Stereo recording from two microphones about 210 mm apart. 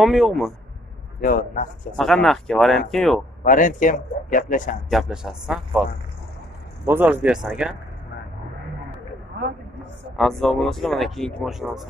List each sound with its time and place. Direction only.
0.0 s speech: centre (ahead or behind)
1.2 s a man's voice: 40° left (ahead or behind)
2.0 s speech: centre (ahead or behind)
3.4 s a man's voice: 40° left (ahead or behind)
4.8 s speech: centre (ahead or behind)
6.9 s speech: 10° right (ahead or behind)
9.3 s a sound: 50° right (ahead or behind)
10.1 s speech: centre (ahead or behind)